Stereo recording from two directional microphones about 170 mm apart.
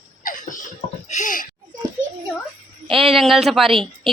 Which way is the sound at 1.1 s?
50° left (ahead or behind).